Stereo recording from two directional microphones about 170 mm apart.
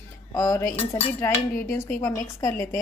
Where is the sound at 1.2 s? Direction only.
15° left (ahead or behind).